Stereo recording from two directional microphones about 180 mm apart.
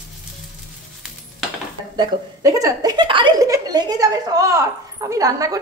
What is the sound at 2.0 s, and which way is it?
Speech, 20° right (ahead or behind).